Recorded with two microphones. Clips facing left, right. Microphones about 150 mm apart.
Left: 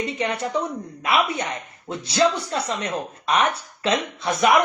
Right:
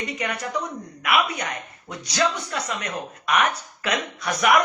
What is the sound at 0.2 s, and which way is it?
Speech, 25° left (ahead or behind).